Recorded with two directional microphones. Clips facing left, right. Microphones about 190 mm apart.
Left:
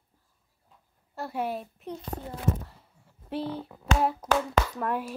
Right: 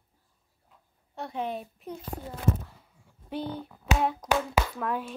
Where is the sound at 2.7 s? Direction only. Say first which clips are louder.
Even; centre (ahead or behind).